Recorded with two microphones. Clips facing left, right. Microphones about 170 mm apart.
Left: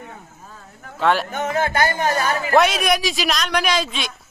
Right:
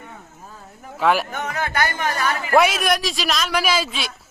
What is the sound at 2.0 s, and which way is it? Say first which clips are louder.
Speech: left 3 dB; 40° left (ahead or behind).